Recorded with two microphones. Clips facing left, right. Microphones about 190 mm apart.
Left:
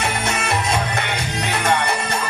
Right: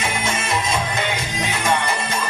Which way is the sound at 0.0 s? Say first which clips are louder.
Left 1 dB; 65° left (ahead or behind).